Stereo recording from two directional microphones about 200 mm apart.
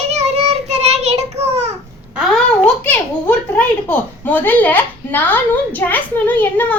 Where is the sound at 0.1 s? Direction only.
35° right (ahead or behind).